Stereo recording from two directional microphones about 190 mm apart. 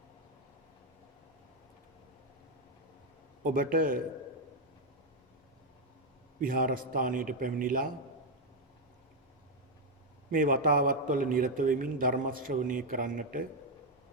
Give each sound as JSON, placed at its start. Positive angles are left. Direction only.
{"t": 3.4, "sound": "a man's voice", "side_deg": -45}
{"t": 6.4, "sound": "a man's voice", "side_deg": -45}
{"t": 10.3, "sound": "a man's voice", "side_deg": -45}